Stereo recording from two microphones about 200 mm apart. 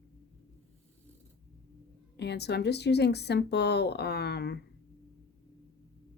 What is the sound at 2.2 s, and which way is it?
Speech, 55° left (ahead or behind).